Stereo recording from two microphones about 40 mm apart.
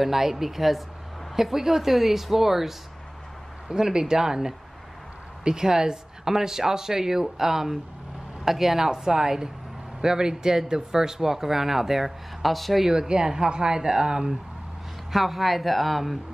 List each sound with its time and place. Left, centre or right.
0.0 s speech: centre
3.6 s speech: centre
12.8 s speech: centre
15.1 s speech: centre